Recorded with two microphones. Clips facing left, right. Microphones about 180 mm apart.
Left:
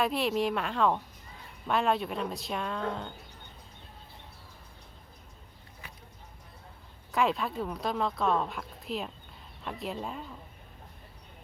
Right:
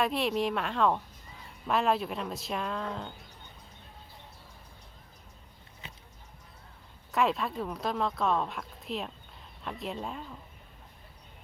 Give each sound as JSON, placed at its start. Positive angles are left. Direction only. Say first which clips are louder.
{"t": 0.0, "sound": "speech", "louder": "even", "side_deg": 0}
{"t": 5.8, "sound": "music", "louder": "right 2 dB", "side_deg": -25}
{"t": 7.1, "sound": "speech", "louder": "even", "side_deg": 0}